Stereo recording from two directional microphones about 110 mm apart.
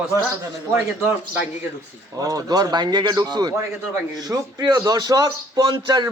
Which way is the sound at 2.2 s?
35° right (ahead or behind).